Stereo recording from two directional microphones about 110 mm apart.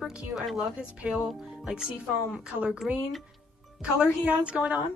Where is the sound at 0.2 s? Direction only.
5° right (ahead or behind).